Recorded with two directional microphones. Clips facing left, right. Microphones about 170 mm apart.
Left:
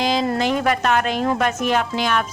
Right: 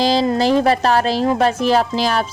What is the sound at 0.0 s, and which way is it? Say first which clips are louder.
Speech: right 4 dB; 35° right (ahead or behind).